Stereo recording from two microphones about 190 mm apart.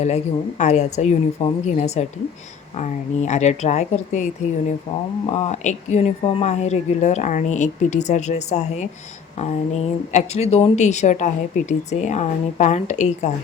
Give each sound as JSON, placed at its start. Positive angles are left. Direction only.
{"t": 0.6, "sound": "speech", "side_deg": 35}